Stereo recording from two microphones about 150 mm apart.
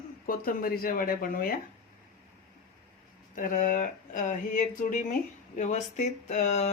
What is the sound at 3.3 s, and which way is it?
Speech, 65° left (ahead or behind).